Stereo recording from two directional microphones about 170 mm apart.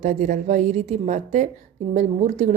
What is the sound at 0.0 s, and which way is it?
A woman's voice, 45° right (ahead or behind).